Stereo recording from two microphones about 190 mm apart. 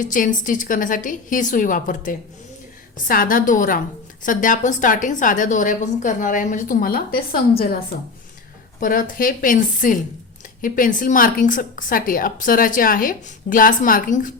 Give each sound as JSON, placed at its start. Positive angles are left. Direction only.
{"t": 0.0, "sound": "a woman's voice", "side_deg": 45}
{"t": 8.8, "sound": "a woman's voice", "side_deg": 45}